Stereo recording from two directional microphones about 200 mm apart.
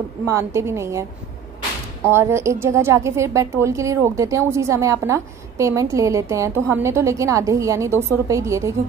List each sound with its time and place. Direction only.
0.3 s a woman's voice: 15° right (ahead or behind)
2.0 s a woman's voice: 10° right (ahead or behind)